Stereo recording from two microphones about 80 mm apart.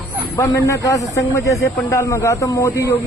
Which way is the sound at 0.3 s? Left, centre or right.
Left.